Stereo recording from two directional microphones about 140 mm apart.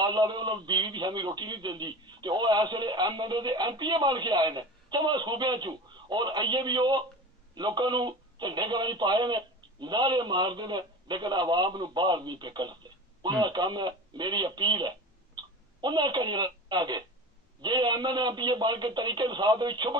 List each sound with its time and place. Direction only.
0.0 s a man's voice: 30° right (ahead or behind)